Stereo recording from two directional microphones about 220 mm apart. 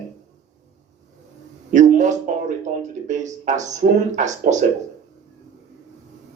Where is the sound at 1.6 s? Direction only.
35° right (ahead or behind).